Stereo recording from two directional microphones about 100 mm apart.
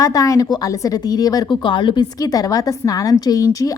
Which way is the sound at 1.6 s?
55° left (ahead or behind).